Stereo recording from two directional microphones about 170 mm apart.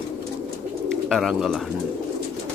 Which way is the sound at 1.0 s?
Centre (ahead or behind).